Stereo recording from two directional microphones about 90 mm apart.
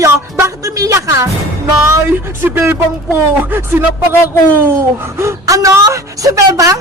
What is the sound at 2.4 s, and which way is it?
Speech, 20° right (ahead or behind).